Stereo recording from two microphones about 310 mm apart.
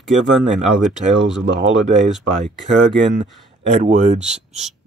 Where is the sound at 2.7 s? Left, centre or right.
Right.